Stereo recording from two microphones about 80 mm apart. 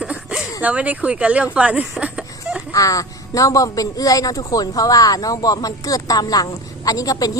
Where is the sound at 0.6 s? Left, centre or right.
Centre.